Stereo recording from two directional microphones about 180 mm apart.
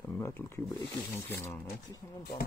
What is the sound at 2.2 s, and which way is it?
Speech, 55° left (ahead or behind).